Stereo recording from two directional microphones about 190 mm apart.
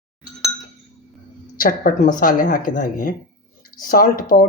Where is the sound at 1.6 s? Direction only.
50° left (ahead or behind).